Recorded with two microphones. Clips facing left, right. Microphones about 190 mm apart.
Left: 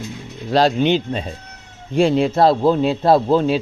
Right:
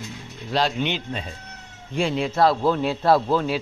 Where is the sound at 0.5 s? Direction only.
40° left (ahead or behind).